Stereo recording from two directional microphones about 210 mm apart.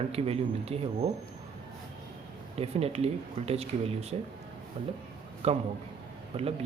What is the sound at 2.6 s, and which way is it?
Speech, 30° right (ahead or behind).